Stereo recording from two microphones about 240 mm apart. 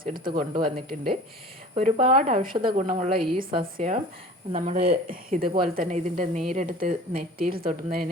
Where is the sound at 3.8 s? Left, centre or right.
Right.